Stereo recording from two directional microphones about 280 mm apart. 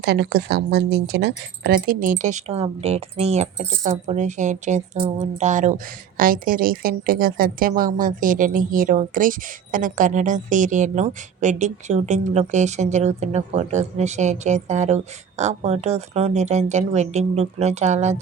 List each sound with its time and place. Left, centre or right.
0.0 s speech: right